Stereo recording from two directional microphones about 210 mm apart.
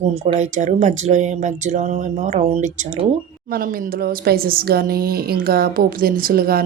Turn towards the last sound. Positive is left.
turn(degrees=-45)  # may be behind; listen again after turning